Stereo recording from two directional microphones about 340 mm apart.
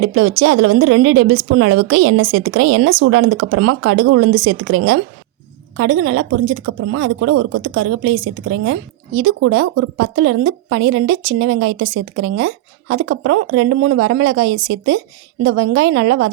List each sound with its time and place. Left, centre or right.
0.0 s speech: right